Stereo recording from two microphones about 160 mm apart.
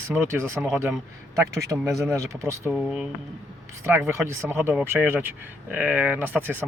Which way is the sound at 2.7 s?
5° right (ahead or behind).